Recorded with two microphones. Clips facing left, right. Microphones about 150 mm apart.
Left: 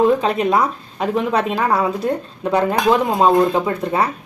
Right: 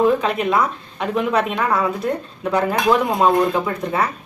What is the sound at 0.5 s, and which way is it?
Speech, 35° left (ahead or behind).